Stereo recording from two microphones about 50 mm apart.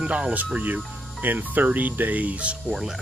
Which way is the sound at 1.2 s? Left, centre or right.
Right.